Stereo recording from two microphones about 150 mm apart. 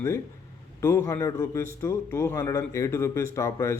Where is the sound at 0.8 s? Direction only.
15° left (ahead or behind).